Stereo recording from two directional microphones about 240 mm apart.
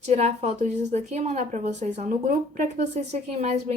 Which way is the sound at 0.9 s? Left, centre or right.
Right.